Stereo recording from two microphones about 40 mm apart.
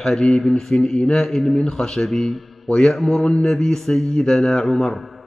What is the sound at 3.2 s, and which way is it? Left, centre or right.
Speech, left.